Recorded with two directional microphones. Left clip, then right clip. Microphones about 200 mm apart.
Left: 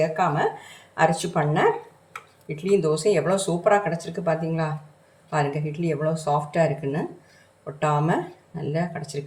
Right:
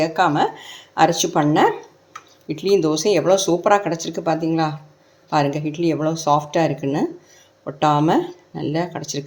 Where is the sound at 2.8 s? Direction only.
40° right (ahead or behind).